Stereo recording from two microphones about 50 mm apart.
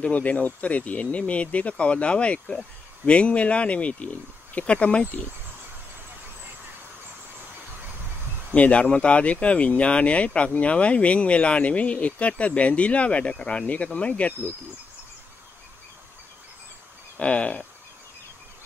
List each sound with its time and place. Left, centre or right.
0.0 s speech: left
8.5 s speech: left
17.2 s speech: left